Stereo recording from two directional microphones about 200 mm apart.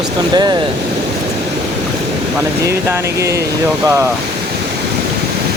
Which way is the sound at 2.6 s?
15° right (ahead or behind).